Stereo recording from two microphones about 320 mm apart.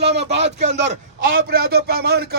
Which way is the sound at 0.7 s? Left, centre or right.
Right.